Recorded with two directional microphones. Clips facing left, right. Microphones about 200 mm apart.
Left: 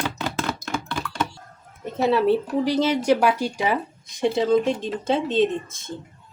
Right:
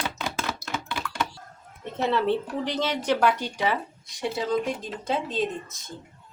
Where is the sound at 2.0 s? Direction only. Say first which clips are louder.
Left 5 dB; 10° left (ahead or behind).